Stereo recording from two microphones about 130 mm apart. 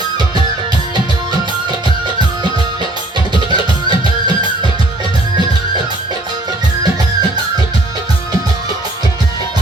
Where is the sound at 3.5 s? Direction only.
35° right (ahead or behind).